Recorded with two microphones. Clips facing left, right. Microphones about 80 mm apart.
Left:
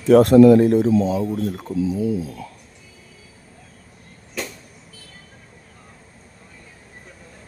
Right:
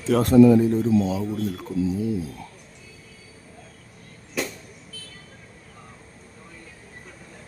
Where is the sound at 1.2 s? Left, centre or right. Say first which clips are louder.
Left 3 dB; centre.